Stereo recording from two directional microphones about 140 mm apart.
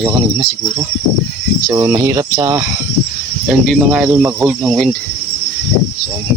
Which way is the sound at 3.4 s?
Centre (ahead or behind).